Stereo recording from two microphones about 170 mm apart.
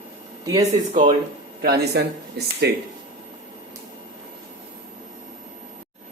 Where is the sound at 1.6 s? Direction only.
75° right (ahead or behind).